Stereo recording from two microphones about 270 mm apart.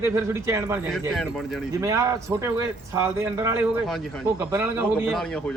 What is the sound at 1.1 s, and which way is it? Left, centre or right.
Speech, centre.